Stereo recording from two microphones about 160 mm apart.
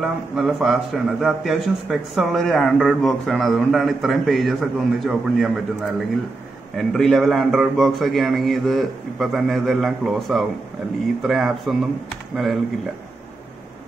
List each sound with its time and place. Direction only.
0.0 s speech: centre (ahead or behind)